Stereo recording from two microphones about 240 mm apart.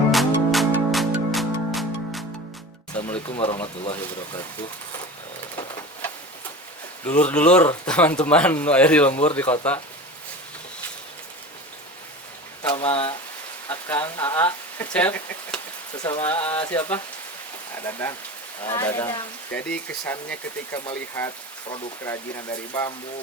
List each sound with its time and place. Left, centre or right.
0.1 s music: centre
3.2 s speech: left
7.0 s speech: centre
12.6 s speech: left
13.7 s speech: centre